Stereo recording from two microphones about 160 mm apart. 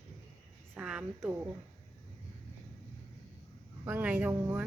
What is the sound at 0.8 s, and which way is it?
Speech, 5° right (ahead or behind).